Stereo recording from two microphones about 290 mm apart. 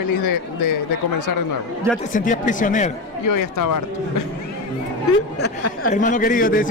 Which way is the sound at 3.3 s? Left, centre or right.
Left.